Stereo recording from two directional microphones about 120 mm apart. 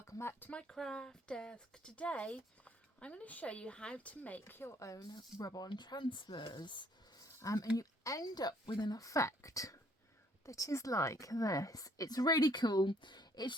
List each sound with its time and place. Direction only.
0.0 s a woman's voice: 20° left (ahead or behind)